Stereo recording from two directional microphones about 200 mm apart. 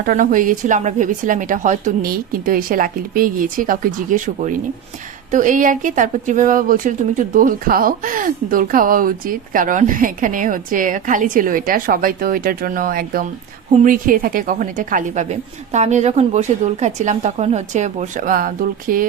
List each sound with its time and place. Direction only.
0.0 s a woman's voice: 40° right (ahead or behind)